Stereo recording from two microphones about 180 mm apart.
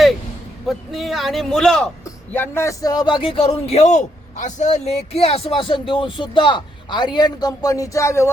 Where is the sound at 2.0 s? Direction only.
10° left (ahead or behind).